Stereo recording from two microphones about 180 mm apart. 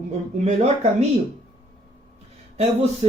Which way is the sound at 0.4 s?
35° right (ahead or behind).